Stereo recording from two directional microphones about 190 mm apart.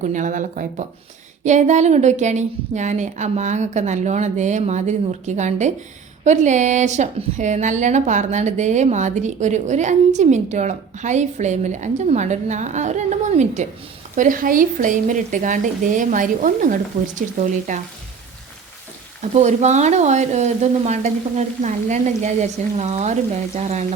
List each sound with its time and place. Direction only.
0.0 s a woman's voice: 40° right (ahead or behind)
19.3 s a woman's voice: 35° right (ahead or behind)